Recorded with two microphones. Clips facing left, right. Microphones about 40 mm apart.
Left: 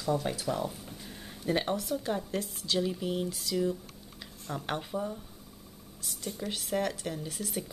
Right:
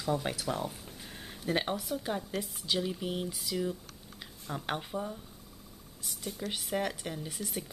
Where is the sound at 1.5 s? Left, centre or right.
Centre.